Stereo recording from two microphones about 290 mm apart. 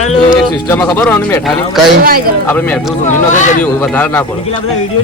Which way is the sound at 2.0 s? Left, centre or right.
Right.